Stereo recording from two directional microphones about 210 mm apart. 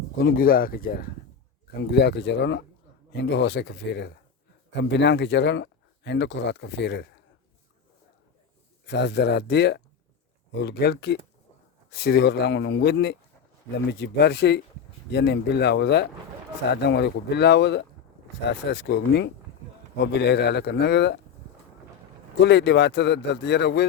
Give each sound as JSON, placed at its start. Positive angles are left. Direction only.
{"t": 0.2, "sound": "speech", "side_deg": 45}
{"t": 8.9, "sound": "speech", "side_deg": 55}
{"t": 22.4, "sound": "speech", "side_deg": 55}